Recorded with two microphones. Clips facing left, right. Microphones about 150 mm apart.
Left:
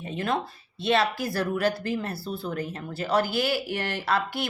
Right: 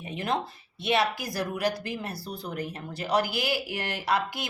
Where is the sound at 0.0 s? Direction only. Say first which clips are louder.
Left 2 dB; 15° right (ahead or behind).